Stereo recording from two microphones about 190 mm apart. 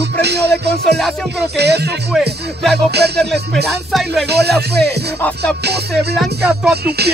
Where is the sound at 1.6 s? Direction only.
60° right (ahead or behind).